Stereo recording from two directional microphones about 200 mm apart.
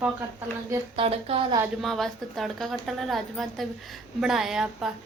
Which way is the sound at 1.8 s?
Centre (ahead or behind).